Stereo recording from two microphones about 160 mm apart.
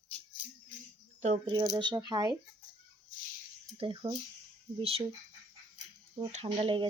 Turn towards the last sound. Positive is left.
turn(degrees=-35)  # may be behind; listen again after turning